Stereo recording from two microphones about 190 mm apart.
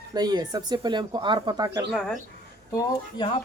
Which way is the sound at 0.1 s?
20° right (ahead or behind).